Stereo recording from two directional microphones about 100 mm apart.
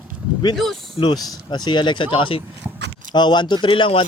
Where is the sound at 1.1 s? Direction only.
40° left (ahead or behind); by 2.4 s 60° left (ahead or behind).